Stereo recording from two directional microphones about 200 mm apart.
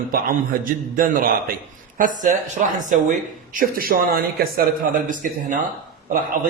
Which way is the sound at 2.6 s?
40° right (ahead or behind).